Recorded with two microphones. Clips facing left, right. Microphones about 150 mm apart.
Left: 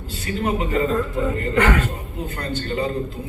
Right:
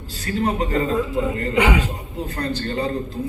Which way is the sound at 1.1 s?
10° right (ahead or behind).